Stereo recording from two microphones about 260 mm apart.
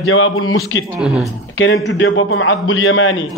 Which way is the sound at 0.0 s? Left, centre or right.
Left.